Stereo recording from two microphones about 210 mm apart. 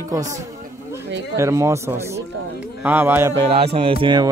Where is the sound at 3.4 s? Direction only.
25° right (ahead or behind).